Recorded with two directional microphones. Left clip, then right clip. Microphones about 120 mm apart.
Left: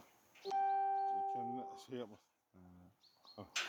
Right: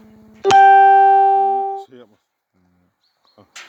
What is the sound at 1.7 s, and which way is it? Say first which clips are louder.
Music: right 17 dB; 15° left (ahead or behind).